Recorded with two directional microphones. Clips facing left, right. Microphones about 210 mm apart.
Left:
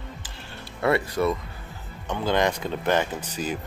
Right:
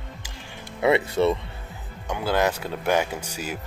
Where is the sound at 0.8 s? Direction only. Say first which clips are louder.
Right 3 dB; 20° right (ahead or behind).